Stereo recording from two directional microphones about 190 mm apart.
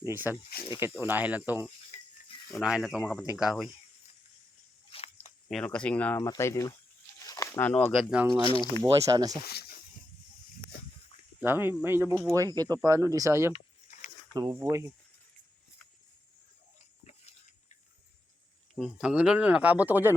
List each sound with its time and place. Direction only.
0.0 s speech: 10° right (ahead or behind)
1.9 s pig: 40° left (ahead or behind)
2.5 s speech: centre (ahead or behind)
4.9 s biting: 30° left (ahead or behind)
5.5 s speech: 5° left (ahead or behind)
7.2 s a sound: 15° left (ahead or behind)
7.9 s speech: 5° right (ahead or behind)
8.8 s speech: 20° right (ahead or behind)
9.4 s snake: 55° left (ahead or behind)
11.3 s speech: 10° right (ahead or behind)
13.5 s a sound: 40° left (ahead or behind)
14.3 s speech: 20° right (ahead or behind)
18.7 s speech: 5° right (ahead or behind)